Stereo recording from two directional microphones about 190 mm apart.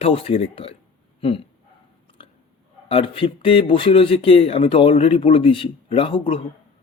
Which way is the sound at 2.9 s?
30° left (ahead or behind).